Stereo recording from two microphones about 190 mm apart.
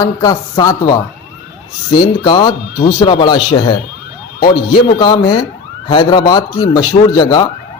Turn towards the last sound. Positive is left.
turn(degrees=20)  # may be behind; listen again after turning